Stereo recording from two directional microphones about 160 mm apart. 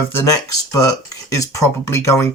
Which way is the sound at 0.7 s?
20° left (ahead or behind).